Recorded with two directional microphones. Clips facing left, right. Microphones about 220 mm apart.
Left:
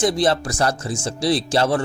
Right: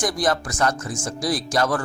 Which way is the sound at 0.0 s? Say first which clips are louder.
Left 4 dB; 25° left (ahead or behind).